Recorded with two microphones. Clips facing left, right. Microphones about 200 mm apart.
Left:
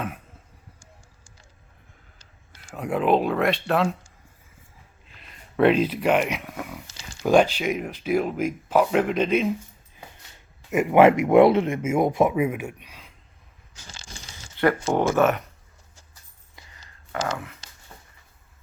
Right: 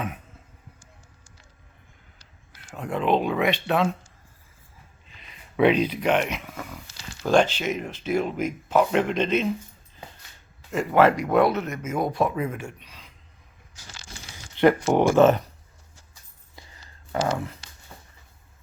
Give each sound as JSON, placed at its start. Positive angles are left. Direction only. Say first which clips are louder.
{"t": 2.6, "sound": "speech", "louder": "left 2 dB", "side_deg": 10}
{"t": 5.0, "sound": "speech", "louder": "left 1 dB", "side_deg": 0}
{"t": 10.7, "sound": "speech", "louder": "left 3 dB", "side_deg": 20}
{"t": 13.9, "sound": "a sound", "louder": "even", "side_deg": 25}
{"t": 14.5, "sound": "a sound", "louder": "right 3 dB", "side_deg": -20}
{"t": 14.9, "sound": "speech", "louder": "right 3 dB", "side_deg": -15}
{"t": 15.2, "sound": "speech", "louder": "right 6 dB", "side_deg": -30}
{"t": 17.1, "sound": "speech", "louder": "right 3 dB", "side_deg": -30}